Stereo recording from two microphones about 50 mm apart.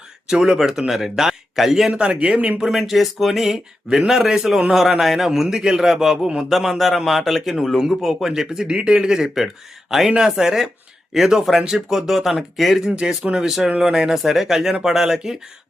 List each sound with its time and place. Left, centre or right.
0.3 s a man's voice: centre
1.9 s speech: right
2.6 s speech: centre
3.8 s a man's voice: centre
14.2 s a man's voice: centre